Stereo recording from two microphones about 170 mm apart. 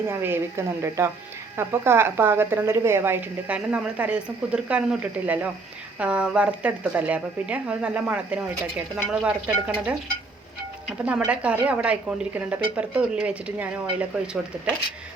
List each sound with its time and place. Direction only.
0.1 s a woman's voice: 15° right (ahead or behind)
11.0 s a woman's voice: 10° right (ahead or behind)